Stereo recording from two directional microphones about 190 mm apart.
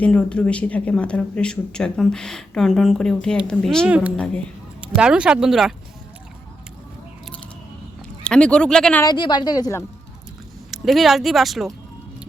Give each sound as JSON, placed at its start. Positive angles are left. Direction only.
{"t": 0.0, "sound": "speech", "side_deg": 5}
{"t": 3.8, "sound": "a woman's voice", "side_deg": -5}
{"t": 8.2, "sound": "speech", "side_deg": 5}
{"t": 9.0, "sound": "a woman's voice", "side_deg": 25}
{"t": 10.7, "sound": "speech", "side_deg": 0}